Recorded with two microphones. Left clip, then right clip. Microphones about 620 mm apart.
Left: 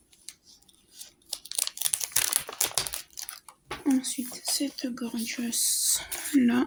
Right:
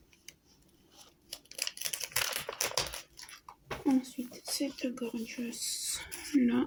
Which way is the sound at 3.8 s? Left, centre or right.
Centre.